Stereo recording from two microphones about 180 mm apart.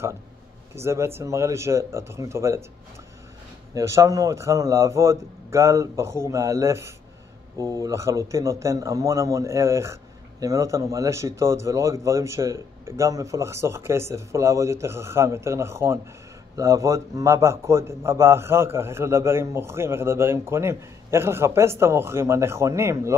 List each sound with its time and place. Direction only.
0.7 s a man's voice: 15° right (ahead or behind)
3.7 s a man's voice: 15° right (ahead or behind)